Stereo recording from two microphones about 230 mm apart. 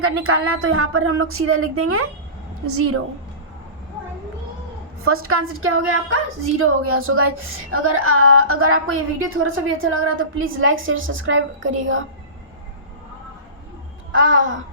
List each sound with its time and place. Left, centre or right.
0.0 s speech: right
5.0 s a woman's voice: right
14.1 s a woman's voice: right